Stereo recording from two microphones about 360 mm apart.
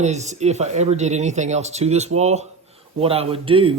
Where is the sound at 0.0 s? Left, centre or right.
Centre.